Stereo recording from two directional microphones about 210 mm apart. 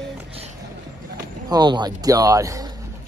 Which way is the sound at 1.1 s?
20° right (ahead or behind).